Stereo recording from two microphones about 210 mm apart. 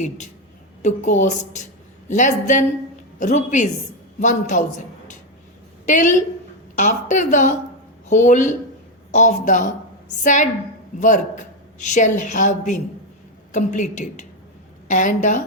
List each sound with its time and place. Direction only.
0.8 s a woman's voice: 35° left (ahead or behind)
5.8 s a woman's voice: 35° left (ahead or behind)